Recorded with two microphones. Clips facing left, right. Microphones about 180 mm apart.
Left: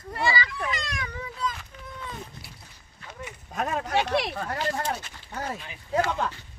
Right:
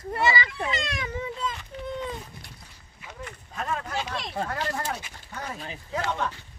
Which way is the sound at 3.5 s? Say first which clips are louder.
Left 5 dB; 65° left (ahead or behind).